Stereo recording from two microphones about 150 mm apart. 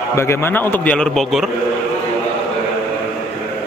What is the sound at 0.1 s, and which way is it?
Speech, 15° left (ahead or behind).